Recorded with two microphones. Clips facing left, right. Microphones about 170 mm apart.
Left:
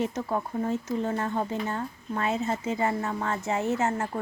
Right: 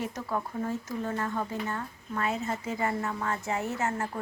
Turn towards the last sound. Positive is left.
turn(degrees=25)  # may be behind; listen again after turning